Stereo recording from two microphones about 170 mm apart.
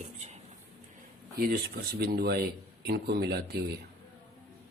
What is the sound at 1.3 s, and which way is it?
A man's voice, 60° right (ahead or behind).